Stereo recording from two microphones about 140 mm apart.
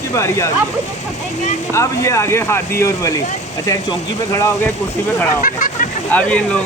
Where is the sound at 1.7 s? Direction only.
20° left (ahead or behind).